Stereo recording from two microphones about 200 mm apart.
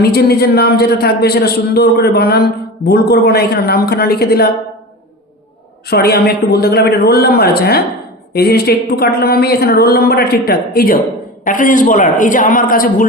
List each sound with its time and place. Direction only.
0.0 s a man's voice: 50° left (ahead or behind)
5.9 s a man's voice: 50° left (ahead or behind)